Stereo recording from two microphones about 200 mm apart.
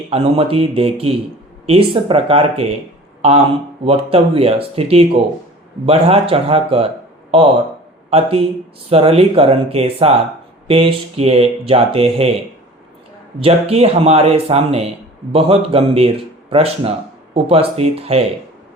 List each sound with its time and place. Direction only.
0.1 s speech: 30° right (ahead or behind)
13.4 s speech: 30° right (ahead or behind)